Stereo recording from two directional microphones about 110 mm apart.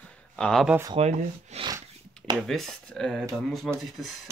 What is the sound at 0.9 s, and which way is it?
Speech, 70° right (ahead or behind).